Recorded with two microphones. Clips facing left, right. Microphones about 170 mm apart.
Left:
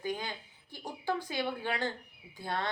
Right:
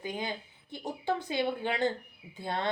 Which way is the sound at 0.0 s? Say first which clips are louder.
Right 1 dB; 20° right (ahead or behind).